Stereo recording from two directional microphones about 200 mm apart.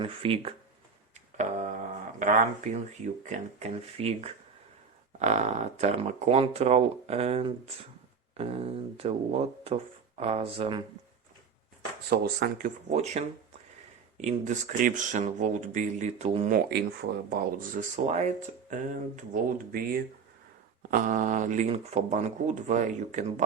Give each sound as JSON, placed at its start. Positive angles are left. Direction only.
{"t": 0.0, "sound": "speech", "side_deg": -30}
{"t": 1.1, "sound": "music", "side_deg": -35}
{"t": 2.1, "sound": "speech", "side_deg": -40}
{"t": 10.2, "sound": "speech", "side_deg": -30}
{"t": 12.0, "sound": "speech", "side_deg": -55}
{"t": 16.5, "sound": "speech", "side_deg": -55}
{"t": 17.2, "sound": "speech", "side_deg": -40}